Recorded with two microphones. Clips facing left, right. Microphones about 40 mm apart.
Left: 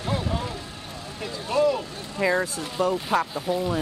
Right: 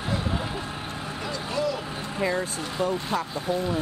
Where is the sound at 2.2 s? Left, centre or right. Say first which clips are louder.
Left 4 dB; left.